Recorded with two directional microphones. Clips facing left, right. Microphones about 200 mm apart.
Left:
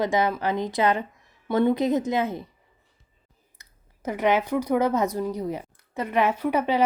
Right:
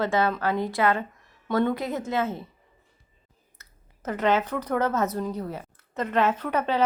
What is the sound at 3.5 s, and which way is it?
A woman's voice, 10° left (ahead or behind).